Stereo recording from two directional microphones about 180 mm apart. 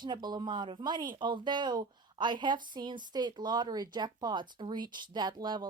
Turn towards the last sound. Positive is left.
turn(degrees=-25)  # may be behind; listen again after turning